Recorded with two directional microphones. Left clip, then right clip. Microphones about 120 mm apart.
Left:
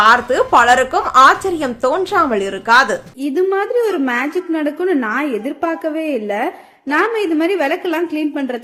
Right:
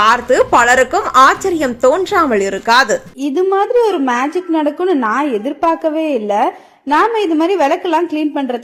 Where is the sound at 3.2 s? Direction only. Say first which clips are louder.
Right 2 dB; 15° right (ahead or behind).